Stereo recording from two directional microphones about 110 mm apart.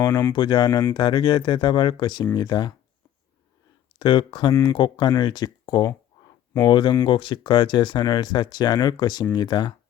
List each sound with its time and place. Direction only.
0.3 s speech: 40° left (ahead or behind)
3.9 s speech: 45° left (ahead or behind)